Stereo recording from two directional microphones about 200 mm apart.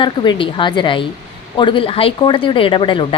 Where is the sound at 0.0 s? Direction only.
25° left (ahead or behind).